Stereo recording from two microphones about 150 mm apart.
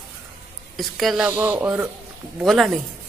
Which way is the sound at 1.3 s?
15° right (ahead or behind).